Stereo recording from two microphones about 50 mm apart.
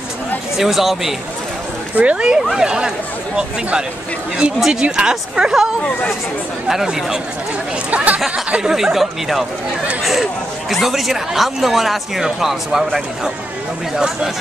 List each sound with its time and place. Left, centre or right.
0.6 s speech: centre
2.0 s speech: right
4.6 s speech: centre
6.7 s speech: centre
7.9 s speech: right
8.6 s speech: centre
10.7 s speech: centre
13.9 s speech: centre